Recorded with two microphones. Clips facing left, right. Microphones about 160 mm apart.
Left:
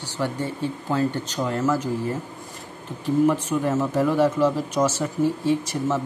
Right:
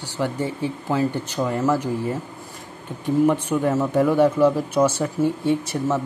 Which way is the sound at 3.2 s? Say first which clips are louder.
Right 2 dB; 10° right (ahead or behind).